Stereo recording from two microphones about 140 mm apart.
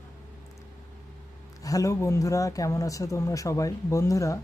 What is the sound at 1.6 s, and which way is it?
Speech, 25° left (ahead or behind).